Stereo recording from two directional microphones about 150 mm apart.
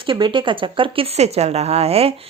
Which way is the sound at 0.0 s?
35° right (ahead or behind).